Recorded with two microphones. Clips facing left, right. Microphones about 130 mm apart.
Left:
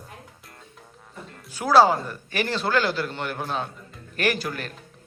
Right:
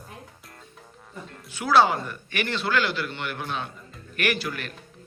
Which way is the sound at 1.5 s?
40° left (ahead or behind).